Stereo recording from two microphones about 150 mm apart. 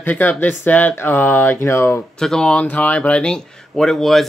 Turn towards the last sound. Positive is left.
turn(degrees=0)  # may be behind; listen again after turning